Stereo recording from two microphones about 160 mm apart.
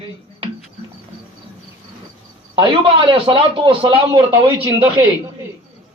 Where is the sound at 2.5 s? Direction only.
35° right (ahead or behind).